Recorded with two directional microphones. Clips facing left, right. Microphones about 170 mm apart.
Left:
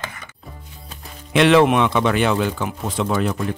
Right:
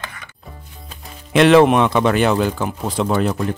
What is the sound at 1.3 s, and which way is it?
Speech, 40° right (ahead or behind).